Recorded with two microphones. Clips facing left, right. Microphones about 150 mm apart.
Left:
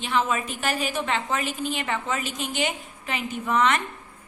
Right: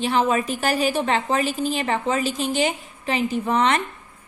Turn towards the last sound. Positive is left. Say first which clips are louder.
# right 3 dB
turn(degrees=-35)  # may be behind; listen again after turning